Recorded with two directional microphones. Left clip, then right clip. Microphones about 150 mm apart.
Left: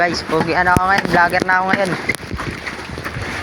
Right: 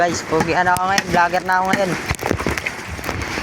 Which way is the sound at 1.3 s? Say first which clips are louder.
Left 2 dB; 20° right (ahead or behind).